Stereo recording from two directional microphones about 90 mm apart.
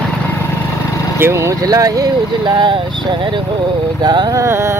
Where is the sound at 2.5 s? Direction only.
60° right (ahead or behind).